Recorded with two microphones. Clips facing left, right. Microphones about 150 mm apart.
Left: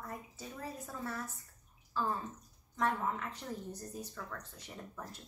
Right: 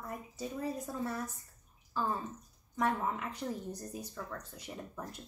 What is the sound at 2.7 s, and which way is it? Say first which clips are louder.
A woman's voice: right 1 dB; 15° right (ahead or behind).